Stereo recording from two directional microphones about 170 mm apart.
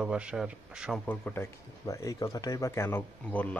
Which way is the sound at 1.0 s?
10° left (ahead or behind).